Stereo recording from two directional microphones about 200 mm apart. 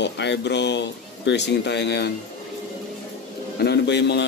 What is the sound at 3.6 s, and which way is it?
Speech, 55° left (ahead or behind).